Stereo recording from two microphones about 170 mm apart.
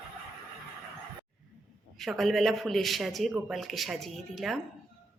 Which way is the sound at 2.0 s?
Centre (ahead or behind).